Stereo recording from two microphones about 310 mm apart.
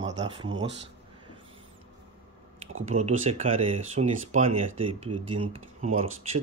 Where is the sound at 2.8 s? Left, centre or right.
Right.